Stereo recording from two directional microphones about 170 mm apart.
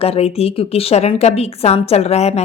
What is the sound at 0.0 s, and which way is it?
A woman's voice, 35° left (ahead or behind).